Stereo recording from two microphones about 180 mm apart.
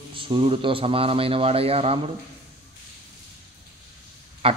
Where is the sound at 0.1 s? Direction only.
30° right (ahead or behind).